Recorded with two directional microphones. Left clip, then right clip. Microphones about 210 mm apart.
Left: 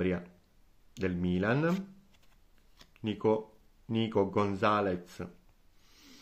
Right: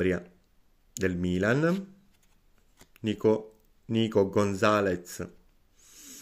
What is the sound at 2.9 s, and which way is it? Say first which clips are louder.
Speech: right 4 dB; 30° right (ahead or behind).